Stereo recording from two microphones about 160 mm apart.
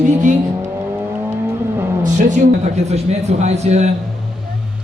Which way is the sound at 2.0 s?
50° right (ahead or behind).